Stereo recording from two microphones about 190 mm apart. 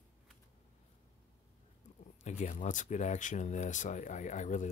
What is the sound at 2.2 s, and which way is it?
Speech, 40° left (ahead or behind).